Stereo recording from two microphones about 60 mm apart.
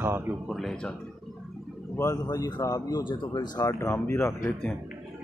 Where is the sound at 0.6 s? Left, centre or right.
Centre.